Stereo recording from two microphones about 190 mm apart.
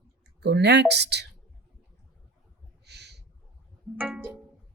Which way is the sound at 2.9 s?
60° right (ahead or behind).